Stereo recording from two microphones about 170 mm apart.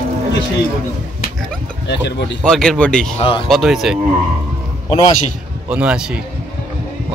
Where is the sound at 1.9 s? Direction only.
90° left.